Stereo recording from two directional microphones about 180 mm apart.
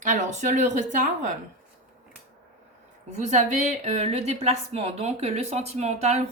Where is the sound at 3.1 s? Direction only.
40° right (ahead or behind).